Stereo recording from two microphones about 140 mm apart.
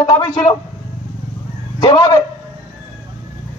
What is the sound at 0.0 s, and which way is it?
Speech, 35° left (ahead or behind).